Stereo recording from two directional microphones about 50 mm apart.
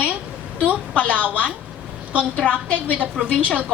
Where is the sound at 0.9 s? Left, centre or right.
Left.